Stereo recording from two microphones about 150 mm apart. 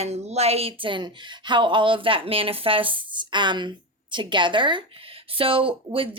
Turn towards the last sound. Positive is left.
turn(degrees=-35)  # may be behind; listen again after turning